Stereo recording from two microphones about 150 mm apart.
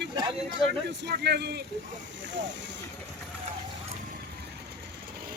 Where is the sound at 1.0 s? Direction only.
90° right.